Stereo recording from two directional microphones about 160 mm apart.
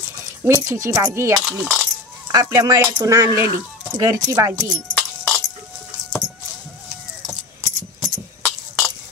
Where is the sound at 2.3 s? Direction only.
20° right (ahead or behind).